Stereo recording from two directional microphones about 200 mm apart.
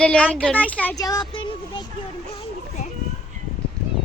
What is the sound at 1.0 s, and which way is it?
Speech, 20° left (ahead or behind).